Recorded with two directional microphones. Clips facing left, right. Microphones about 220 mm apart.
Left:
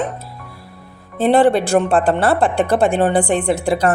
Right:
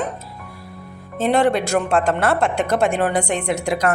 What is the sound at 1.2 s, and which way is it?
A woman's voice, 30° left (ahead or behind).